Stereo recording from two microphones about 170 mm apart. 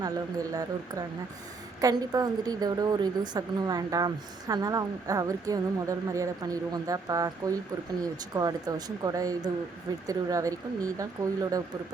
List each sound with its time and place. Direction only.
0.0 s a woman's voice: 20° right (ahead or behind)